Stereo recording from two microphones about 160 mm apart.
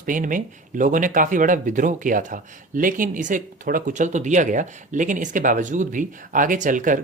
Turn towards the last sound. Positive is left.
turn(degrees=-55)  # may be behind; listen again after turning